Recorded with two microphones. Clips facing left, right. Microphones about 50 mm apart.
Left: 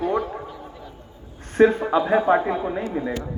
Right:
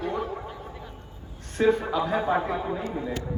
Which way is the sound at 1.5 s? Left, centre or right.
Left.